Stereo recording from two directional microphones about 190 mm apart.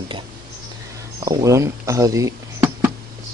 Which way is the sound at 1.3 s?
15° right (ahead or behind).